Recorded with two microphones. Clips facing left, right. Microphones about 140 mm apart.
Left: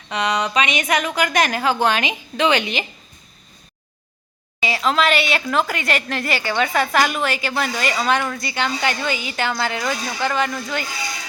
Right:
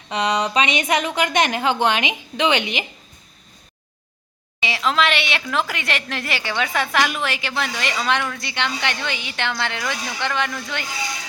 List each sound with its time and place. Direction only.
0.1 s a woman's voice: 30° right (ahead or behind)
4.6 s a woman's voice: centre (ahead or behind)